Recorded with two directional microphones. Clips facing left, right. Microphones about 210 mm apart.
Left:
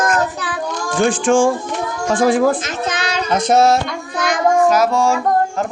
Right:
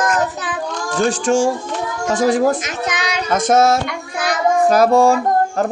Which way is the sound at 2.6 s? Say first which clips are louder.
Left 1 dB; 15° right (ahead or behind).